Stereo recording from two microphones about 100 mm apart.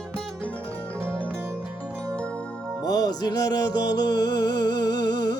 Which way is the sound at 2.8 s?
40° left (ahead or behind).